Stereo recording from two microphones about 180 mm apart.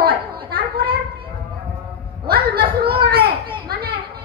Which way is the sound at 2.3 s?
55° right (ahead or behind).